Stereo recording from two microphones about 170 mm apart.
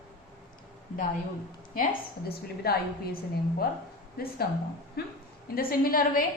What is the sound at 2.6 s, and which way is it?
Speech, 65° left (ahead or behind).